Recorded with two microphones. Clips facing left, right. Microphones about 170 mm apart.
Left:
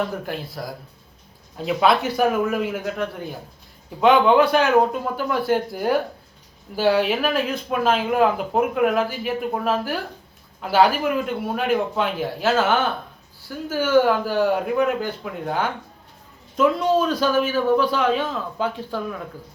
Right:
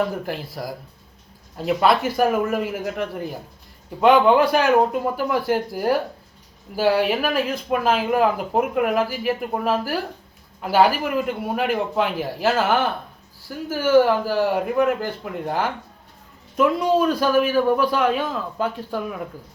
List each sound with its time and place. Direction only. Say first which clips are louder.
0.3 s speech: right 1 dB; 10° right (ahead or behind)